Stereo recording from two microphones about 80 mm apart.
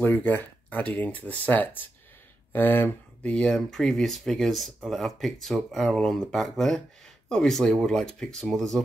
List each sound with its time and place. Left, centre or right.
0.0 s speech: left
3.3 s speech: centre